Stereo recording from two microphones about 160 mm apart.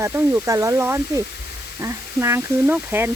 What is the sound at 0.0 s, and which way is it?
Speech, 20° right (ahead or behind).